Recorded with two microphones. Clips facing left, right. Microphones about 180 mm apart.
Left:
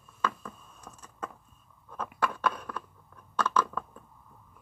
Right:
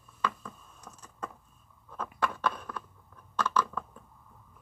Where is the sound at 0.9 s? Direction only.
25° left (ahead or behind).